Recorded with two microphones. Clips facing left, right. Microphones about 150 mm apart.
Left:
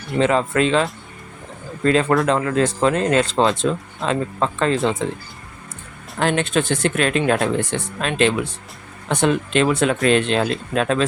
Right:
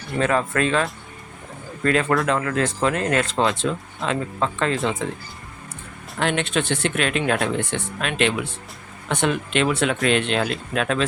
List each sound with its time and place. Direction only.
0.2 s speech: 25° left (ahead or behind)
6.1 s speech: 40° left (ahead or behind)